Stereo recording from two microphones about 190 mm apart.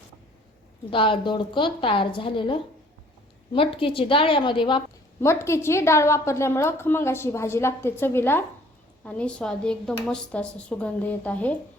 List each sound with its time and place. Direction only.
0.9 s a woman's voice: 25° left (ahead or behind)
5.2 s a woman's voice: 15° left (ahead or behind)